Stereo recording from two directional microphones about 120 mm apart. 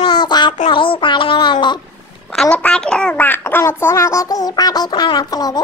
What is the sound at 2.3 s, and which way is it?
A child's voice, 5° left (ahead or behind).